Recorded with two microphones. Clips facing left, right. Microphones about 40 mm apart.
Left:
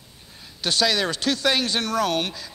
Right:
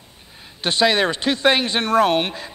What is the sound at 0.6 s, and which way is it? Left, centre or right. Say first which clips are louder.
A man's voice: right 5 dB; right.